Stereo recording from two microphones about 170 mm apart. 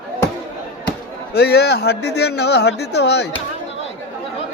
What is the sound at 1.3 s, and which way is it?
Speech, 70° left (ahead or behind).